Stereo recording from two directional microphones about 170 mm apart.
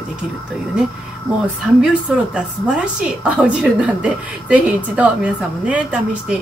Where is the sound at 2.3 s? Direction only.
5° right (ahead or behind).